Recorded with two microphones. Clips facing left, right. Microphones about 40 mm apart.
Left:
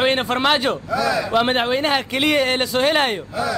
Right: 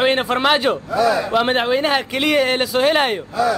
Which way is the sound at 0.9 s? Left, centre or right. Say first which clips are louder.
Right 4 dB; right.